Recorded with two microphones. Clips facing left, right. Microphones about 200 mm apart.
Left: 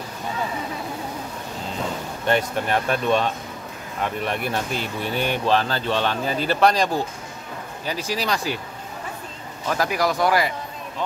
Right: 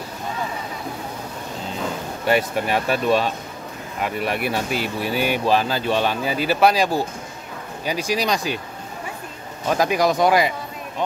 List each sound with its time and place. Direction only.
2.2 s speech: 10° right (ahead or behind)
9.7 s speech: 20° right (ahead or behind)